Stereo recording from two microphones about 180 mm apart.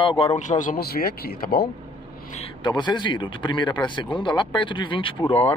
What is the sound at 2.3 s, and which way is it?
Speech, 35° left (ahead or behind).